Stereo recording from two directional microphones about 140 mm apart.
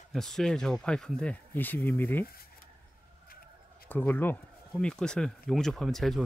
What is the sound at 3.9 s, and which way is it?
Speech, 15° left (ahead or behind).